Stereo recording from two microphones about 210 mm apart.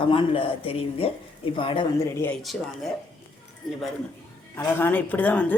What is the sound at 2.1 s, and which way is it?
Speech, 10° left (ahead or behind).